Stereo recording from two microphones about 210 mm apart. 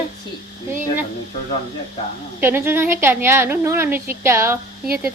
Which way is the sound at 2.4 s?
10° right (ahead or behind).